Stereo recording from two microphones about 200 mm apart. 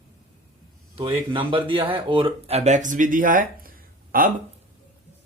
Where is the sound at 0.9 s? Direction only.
25° right (ahead or behind); by 4.3 s 45° right (ahead or behind).